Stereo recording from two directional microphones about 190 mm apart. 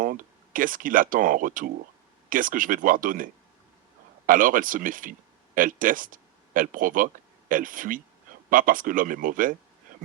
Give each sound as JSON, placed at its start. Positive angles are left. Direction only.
{"t": 0.0, "sound": "speech", "side_deg": -45}
{"t": 4.3, "sound": "speech", "side_deg": -45}